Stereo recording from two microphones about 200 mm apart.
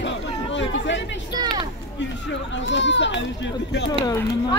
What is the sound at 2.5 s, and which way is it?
Speech, 65° left (ahead or behind).